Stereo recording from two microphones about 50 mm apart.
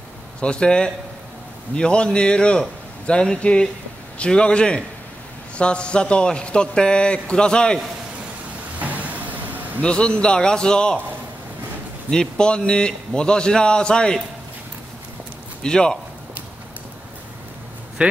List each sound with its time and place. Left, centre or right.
0.4 s a man's voice: centre
8.7 s vehicle: right
9.8 s a man's voice: left
12.1 s a man's voice: centre
15.6 s a man's voice: centre